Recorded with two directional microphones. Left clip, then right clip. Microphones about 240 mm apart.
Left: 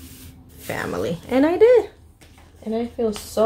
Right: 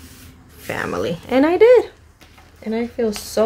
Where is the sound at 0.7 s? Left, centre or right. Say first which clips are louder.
Right 3 dB; centre.